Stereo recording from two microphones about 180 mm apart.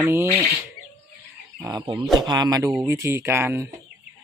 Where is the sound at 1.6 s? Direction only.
25° right (ahead or behind).